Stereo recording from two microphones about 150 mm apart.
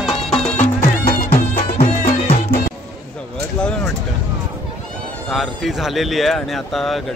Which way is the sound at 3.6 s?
5° left (ahead or behind).